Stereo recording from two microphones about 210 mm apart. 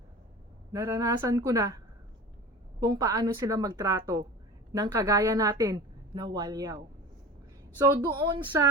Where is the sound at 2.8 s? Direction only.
15° right (ahead or behind).